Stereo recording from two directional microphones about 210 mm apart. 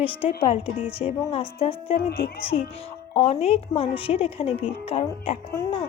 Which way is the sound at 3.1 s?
30° left (ahead or behind).